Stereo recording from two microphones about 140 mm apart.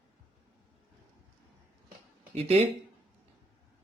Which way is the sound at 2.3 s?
45° right (ahead or behind).